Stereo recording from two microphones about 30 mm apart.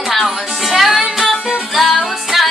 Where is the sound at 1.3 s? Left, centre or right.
Right.